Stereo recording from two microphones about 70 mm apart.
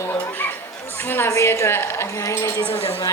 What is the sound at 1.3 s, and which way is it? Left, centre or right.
Speech, left.